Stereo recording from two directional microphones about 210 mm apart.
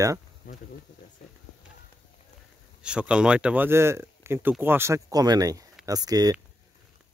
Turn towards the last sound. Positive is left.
turn(degrees=-20)  # may be behind; listen again after turning